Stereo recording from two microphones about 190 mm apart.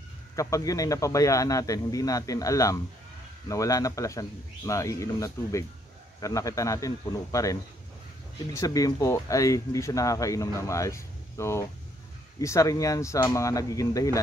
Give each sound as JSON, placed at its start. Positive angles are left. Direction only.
{"t": 0.4, "sound": "speech", "side_deg": 15}
{"t": 8.5, "sound": "speech", "side_deg": 20}